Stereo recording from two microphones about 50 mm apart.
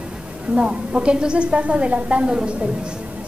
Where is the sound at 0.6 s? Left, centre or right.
Right.